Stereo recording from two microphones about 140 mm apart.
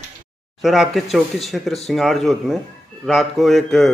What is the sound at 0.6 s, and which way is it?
Speech, centre (ahead or behind).